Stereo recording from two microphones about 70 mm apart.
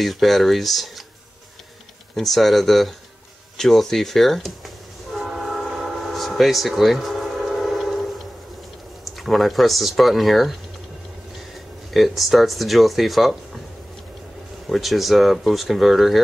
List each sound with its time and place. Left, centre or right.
0.0 s speech: centre
2.1 s speech: centre
3.5 s train horn: centre
9.0 s speech: centre
11.9 s speech: centre
14.7 s speech: centre